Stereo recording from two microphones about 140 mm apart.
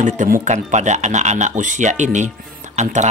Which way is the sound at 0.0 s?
60° right (ahead or behind).